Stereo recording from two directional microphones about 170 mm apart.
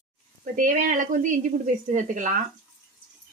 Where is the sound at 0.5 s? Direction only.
50° right (ahead or behind).